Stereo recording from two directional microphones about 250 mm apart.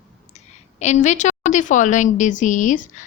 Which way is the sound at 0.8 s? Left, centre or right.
Left.